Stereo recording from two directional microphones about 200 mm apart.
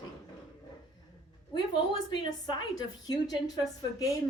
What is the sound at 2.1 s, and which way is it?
A woman's voice, 20° left (ahead or behind).